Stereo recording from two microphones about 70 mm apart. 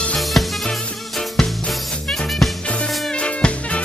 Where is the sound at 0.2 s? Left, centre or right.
Centre.